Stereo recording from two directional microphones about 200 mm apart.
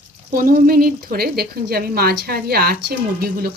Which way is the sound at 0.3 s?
45° right (ahead or behind).